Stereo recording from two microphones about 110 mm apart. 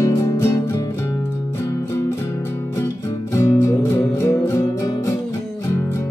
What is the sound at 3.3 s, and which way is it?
Music, 25° left (ahead or behind).